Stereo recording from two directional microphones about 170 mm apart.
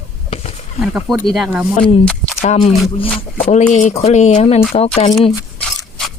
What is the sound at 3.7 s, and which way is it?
Speech, 45° left (ahead or behind).